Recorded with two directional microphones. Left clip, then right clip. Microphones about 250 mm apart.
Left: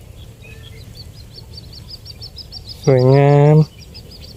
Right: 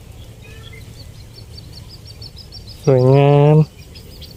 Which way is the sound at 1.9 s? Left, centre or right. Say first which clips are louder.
Left 3 dB; left.